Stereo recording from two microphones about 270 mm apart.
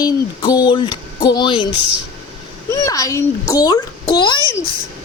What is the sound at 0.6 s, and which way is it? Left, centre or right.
Speech, centre.